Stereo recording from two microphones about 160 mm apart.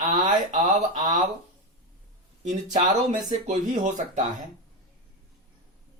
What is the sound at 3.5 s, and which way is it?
Speech, 50° right (ahead or behind).